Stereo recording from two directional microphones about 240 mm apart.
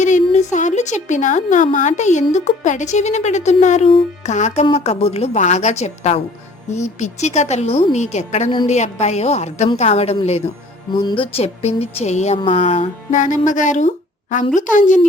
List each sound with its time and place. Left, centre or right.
0.0 s a woman's voice: left